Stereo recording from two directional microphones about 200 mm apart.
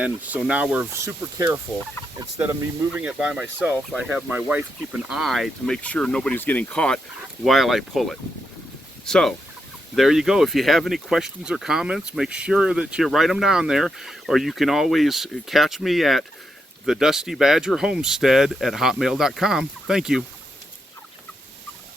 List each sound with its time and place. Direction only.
0.0 s speech: 5° right (ahead or behind)